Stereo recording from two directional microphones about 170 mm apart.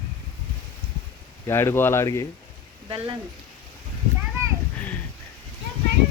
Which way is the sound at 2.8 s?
30° right (ahead or behind).